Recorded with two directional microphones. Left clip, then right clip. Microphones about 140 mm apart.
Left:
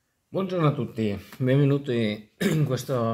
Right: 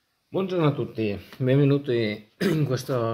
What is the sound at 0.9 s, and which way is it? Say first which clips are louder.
Speech: right 1 dB; centre (ahead or behind).